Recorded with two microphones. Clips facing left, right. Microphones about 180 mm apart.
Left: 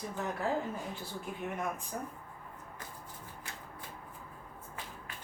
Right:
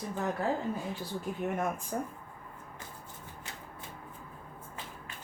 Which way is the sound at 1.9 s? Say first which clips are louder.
Right 5 dB; 45° right (ahead or behind).